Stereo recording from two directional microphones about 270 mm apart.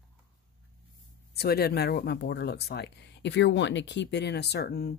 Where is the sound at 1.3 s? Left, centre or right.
Left.